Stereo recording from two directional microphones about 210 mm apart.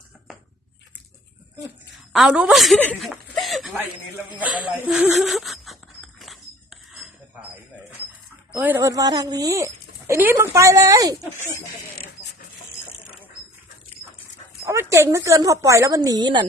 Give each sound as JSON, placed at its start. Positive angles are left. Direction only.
{"t": 2.1, "sound": "speech", "side_deg": 0}
{"t": 6.1, "sound": "a sound", "side_deg": 0}
{"t": 8.5, "sound": "a woman's voice", "side_deg": -10}
{"t": 14.6, "sound": "a woman's voice", "side_deg": -15}